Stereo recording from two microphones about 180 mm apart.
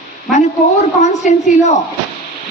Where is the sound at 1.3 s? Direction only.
40° left (ahead or behind).